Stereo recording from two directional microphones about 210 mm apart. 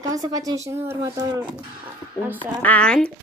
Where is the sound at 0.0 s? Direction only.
15° right (ahead or behind).